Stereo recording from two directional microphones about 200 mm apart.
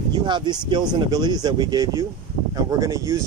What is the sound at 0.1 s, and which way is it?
Speech, 20° right (ahead or behind).